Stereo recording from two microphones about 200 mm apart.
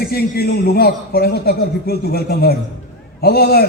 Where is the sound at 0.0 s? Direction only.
50° left (ahead or behind).